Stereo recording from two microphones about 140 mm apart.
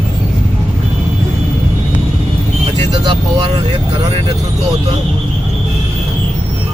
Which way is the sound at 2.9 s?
40° right (ahead or behind).